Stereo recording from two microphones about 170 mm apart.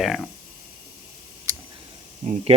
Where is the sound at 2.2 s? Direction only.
40° right (ahead or behind).